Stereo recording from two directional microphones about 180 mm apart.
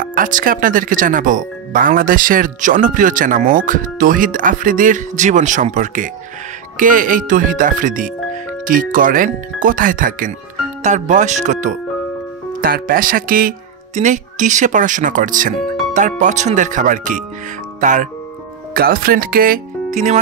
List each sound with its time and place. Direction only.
0.0 s speech: 50° right (ahead or behind)
12.6 s speech: 55° right (ahead or behind)
18.7 s speech: 55° right (ahead or behind)